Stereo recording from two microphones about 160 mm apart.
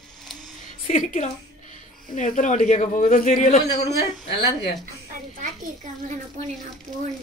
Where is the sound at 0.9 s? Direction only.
50° left (ahead or behind).